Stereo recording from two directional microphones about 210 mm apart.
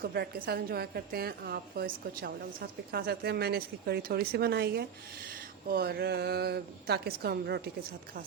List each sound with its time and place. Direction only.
0.0 s a woman's voice: 45° right (ahead or behind)